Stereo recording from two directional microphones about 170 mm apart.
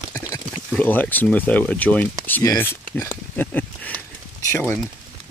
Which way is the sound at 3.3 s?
10° left (ahead or behind).